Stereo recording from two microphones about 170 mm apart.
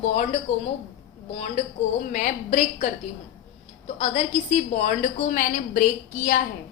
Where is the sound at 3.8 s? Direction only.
40° left (ahead or behind).